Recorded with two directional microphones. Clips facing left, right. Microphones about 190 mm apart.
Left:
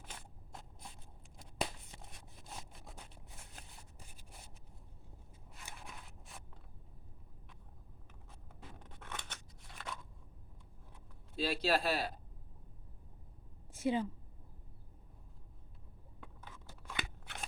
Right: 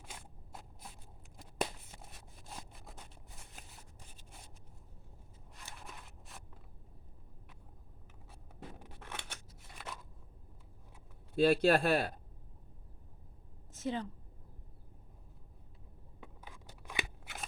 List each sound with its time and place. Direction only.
0.0 s a sound: 5° right (ahead or behind)
5.5 s a sound: centre (ahead or behind)
8.8 s scissors: 10° right (ahead or behind)
11.3 s a man's voice: 55° right (ahead or behind)
13.7 s a woman's voice: 10° left (ahead or behind)
16.2 s scissors: 10° right (ahead or behind)